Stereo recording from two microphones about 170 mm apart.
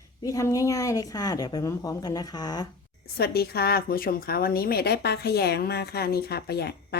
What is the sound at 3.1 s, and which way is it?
A woman's voice, 65° left (ahead or behind).